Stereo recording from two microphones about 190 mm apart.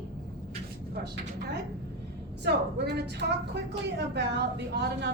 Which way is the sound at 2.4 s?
60° right (ahead or behind).